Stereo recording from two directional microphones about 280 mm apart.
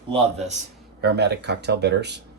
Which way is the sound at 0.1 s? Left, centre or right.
Right.